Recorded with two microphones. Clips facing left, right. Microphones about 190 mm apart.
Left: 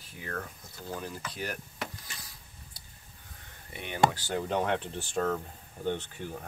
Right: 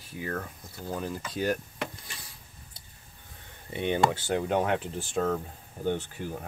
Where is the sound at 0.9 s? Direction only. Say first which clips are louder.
Right 6 dB; 20° right (ahead or behind).